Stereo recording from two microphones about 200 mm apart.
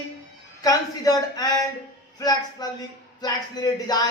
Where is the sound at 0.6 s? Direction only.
20° left (ahead or behind).